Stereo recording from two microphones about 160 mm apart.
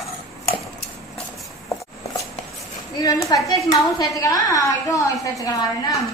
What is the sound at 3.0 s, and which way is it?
A woman's voice, 20° left (ahead or behind).